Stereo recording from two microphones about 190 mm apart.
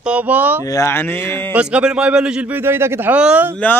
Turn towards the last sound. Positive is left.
turn(degrees=-10)  # may be behind; listen again after turning